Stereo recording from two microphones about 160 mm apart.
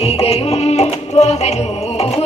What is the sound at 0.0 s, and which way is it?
Music, 40° left (ahead or behind).